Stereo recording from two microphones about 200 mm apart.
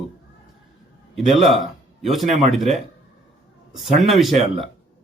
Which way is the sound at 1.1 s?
Centre (ahead or behind).